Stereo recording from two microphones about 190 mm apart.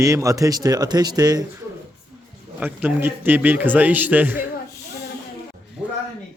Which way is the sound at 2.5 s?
10° right (ahead or behind).